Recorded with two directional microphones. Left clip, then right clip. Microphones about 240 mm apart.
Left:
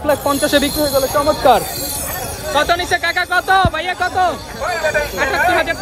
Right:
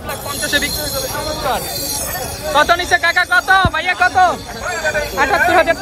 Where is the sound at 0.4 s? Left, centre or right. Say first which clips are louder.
Left 3 dB; centre.